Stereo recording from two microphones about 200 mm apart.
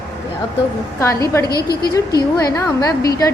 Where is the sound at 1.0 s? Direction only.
15° left (ahead or behind).